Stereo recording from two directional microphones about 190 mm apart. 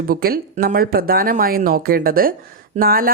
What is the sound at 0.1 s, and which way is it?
Speech, 50° right (ahead or behind).